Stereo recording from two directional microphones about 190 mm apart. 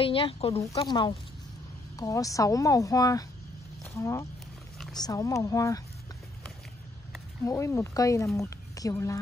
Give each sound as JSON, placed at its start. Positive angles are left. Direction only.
{"t": 0.0, "sound": "a woman's voice", "side_deg": 30}
{"t": 7.4, "sound": "a woman's voice", "side_deg": 15}